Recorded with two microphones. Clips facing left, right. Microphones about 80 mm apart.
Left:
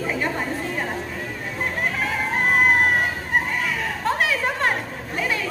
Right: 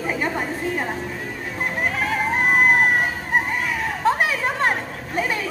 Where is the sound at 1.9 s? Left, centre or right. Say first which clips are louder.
Right 2 dB; centre.